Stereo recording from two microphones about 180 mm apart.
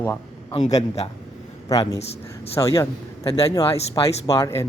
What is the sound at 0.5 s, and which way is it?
Speech, 40° left (ahead or behind).